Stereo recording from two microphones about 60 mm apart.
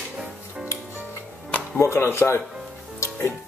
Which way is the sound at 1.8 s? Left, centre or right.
Left.